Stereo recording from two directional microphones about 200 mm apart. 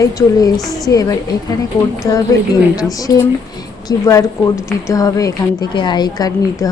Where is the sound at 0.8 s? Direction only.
20° left (ahead or behind).